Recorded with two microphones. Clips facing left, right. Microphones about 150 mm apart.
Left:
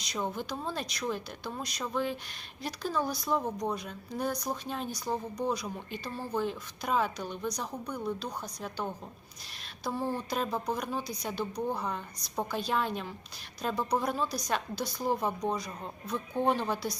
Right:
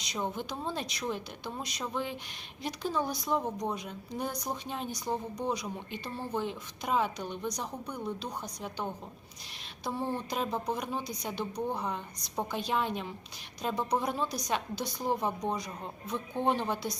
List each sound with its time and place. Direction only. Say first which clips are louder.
0.0 s a woman's voice: even; 20° right (ahead or behind)